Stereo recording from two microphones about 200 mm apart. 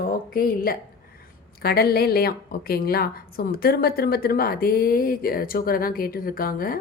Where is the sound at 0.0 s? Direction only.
45° left (ahead or behind).